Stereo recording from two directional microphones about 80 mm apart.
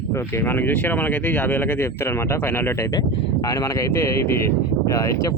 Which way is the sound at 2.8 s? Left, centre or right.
Left.